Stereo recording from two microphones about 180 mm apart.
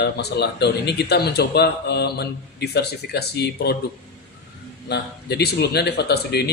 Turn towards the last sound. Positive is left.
turn(degrees=65)  # may be behind; listen again after turning